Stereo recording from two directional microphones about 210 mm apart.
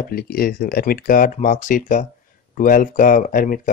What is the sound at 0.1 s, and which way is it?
Speech, 45° left (ahead or behind).